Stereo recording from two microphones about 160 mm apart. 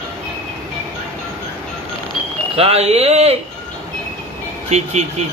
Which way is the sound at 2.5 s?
40° right (ahead or behind).